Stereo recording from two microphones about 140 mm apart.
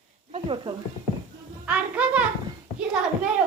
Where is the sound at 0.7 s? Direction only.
30° right (ahead or behind).